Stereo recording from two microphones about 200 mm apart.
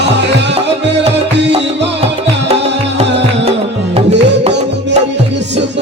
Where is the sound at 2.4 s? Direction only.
30° right (ahead or behind).